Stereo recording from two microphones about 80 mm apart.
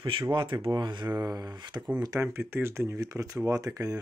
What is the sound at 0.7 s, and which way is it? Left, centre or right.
Mantra, right.